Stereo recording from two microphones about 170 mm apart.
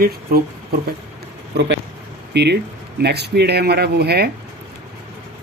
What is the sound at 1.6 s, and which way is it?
Speech, 90° right.